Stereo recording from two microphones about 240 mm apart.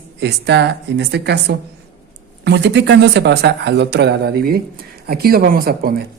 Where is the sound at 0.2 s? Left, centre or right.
Right.